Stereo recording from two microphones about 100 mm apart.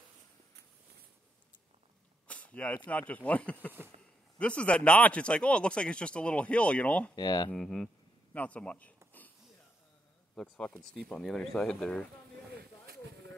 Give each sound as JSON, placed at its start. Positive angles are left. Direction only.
{"t": 2.2, "sound": "a sound", "side_deg": 15}
{"t": 2.9, "sound": "speech", "side_deg": 15}
{"t": 7.2, "sound": "speech", "side_deg": 45}
{"t": 7.5, "sound": "speech", "side_deg": 5}
{"t": 8.3, "sound": "speech", "side_deg": 15}
{"t": 10.3, "sound": "speech", "side_deg": 10}